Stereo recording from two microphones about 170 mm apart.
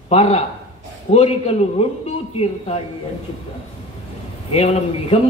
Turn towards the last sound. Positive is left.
turn(degrees=40)  # may be behind; listen again after turning